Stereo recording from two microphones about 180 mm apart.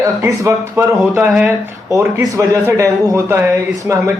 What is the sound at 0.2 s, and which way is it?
A man's voice, 15° right (ahead or behind).